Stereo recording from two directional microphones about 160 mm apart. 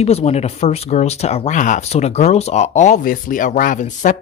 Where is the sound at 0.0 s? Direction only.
40° left (ahead or behind).